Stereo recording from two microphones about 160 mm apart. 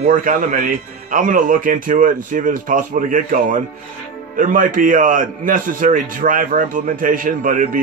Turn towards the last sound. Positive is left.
turn(degrees=-55)  # may be behind; listen again after turning